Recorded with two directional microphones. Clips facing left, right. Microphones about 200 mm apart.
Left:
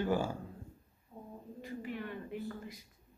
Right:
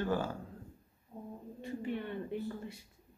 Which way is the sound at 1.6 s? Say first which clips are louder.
Right 3 dB; 30° right (ahead or behind).